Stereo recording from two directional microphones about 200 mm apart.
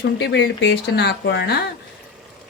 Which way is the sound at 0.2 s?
60° left (ahead or behind).